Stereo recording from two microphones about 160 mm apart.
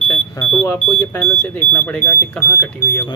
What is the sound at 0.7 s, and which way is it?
Speech, 15° left (ahead or behind).